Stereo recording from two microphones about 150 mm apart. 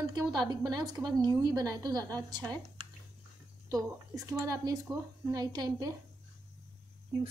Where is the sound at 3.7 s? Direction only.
20° right (ahead or behind).